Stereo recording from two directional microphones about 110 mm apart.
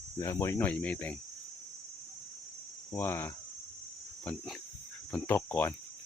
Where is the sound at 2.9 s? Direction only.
20° left (ahead or behind).